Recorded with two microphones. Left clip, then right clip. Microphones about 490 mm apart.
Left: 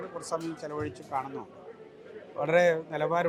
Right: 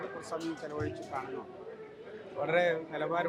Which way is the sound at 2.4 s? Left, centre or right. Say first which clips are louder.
Left 5 dB; left.